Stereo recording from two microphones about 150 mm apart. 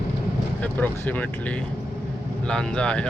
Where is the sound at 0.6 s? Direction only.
10° left (ahead or behind).